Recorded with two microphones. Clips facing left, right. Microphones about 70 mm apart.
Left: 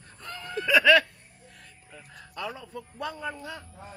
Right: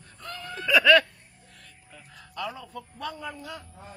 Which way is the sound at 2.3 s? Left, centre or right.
Left.